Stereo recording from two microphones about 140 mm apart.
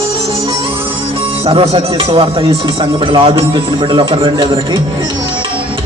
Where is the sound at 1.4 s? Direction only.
45° right (ahead or behind).